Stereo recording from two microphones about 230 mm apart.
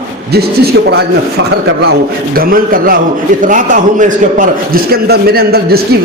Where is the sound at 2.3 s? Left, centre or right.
Right.